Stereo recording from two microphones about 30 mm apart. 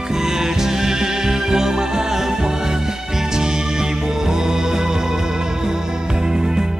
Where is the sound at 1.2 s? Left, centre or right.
Centre.